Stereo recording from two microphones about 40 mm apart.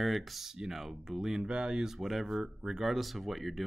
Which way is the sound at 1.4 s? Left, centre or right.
Right.